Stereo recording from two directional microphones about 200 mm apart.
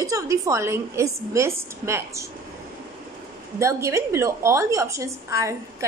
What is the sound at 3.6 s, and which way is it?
A woman's voice, 15° right (ahead or behind).